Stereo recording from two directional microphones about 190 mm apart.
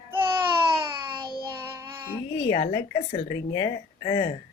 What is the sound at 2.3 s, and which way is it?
Speech, 25° left (ahead or behind).